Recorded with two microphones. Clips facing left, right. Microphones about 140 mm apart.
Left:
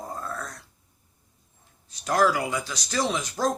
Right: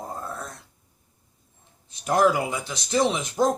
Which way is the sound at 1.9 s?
20° right (ahead or behind).